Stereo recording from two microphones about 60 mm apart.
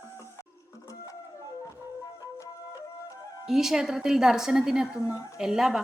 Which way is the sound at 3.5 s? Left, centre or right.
Centre.